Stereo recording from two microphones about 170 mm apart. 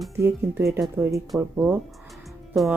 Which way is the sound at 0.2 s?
15° right (ahead or behind).